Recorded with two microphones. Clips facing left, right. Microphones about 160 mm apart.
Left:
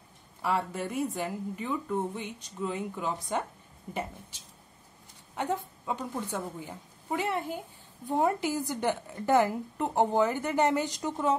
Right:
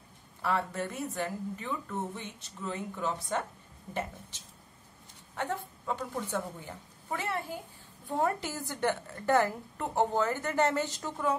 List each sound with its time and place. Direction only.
0.4 s a woman's voice: 15° left (ahead or behind)
5.3 s a woman's voice: 15° left (ahead or behind)